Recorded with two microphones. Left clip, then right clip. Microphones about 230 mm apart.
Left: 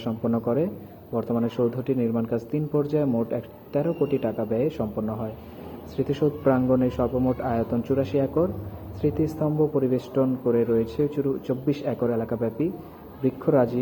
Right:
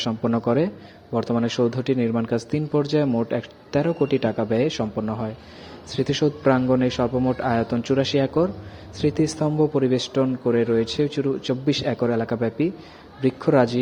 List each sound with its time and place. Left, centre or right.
0.0 s speech: right